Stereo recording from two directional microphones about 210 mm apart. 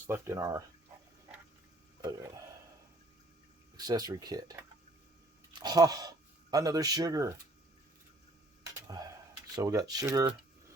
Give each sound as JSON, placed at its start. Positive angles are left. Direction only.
{"t": 0.1, "sound": "speech", "side_deg": -15}
{"t": 2.0, "sound": "speech", "side_deg": -15}
{"t": 3.8, "sound": "speech", "side_deg": -20}
{"t": 5.5, "sound": "speech", "side_deg": -20}
{"t": 8.9, "sound": "speech", "side_deg": -15}